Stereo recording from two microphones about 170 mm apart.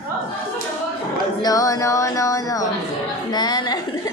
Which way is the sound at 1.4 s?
20° left (ahead or behind).